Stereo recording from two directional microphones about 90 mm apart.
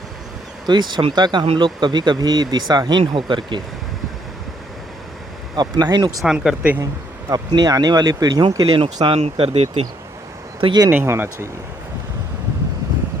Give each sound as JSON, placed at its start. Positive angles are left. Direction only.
{"t": 0.7, "sound": "speech", "side_deg": -55}
{"t": 3.0, "sound": "speech", "side_deg": -70}
{"t": 5.5, "sound": "speech", "side_deg": -50}
{"t": 6.2, "sound": "speech", "side_deg": -5}
{"t": 7.3, "sound": "speech", "side_deg": -45}
{"t": 11.0, "sound": "speech", "side_deg": -30}